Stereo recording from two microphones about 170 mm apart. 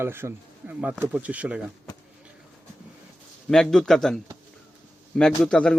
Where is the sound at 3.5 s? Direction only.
Centre (ahead or behind).